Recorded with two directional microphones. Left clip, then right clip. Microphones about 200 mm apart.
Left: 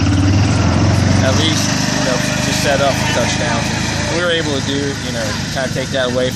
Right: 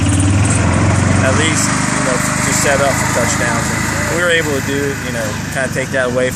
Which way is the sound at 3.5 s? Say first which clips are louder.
Right 2 dB; 10° left (ahead or behind).